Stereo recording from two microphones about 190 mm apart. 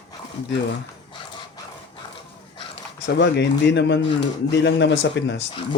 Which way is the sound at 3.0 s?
65° left (ahead or behind).